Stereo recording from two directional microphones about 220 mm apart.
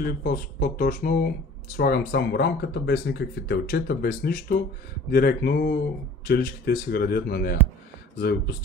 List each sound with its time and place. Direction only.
0.0 s speech: 40° left (ahead or behind)